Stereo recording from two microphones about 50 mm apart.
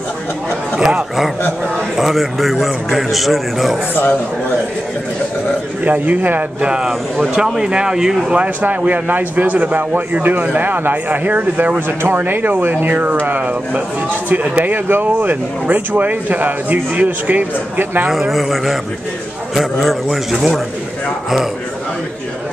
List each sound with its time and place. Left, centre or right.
0.7 s a sound: centre
2.0 s a man's voice: centre
3.9 s speech: left
5.9 s speech: right
6.6 s speech: centre
8.4 s speech: right
14.3 s speech: right
18.1 s a man's voice: centre